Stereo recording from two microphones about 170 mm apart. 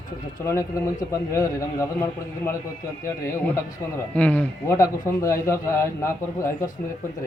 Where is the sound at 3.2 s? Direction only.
10° left (ahead or behind).